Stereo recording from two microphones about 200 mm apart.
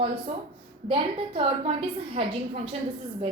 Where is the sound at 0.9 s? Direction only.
30° right (ahead or behind).